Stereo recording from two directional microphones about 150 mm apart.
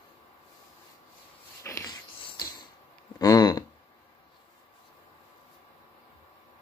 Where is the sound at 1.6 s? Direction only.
20° left (ahead or behind).